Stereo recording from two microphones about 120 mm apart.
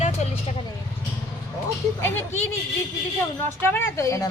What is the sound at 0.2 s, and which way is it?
Vehicle, 75° left (ahead or behind).